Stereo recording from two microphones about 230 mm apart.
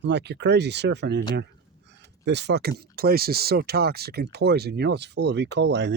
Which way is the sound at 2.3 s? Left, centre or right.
Right.